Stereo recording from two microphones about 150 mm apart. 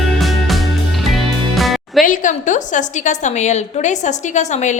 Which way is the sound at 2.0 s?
60° left (ahead or behind).